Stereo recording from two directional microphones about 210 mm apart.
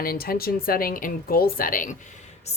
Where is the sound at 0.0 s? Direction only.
45° left (ahead or behind).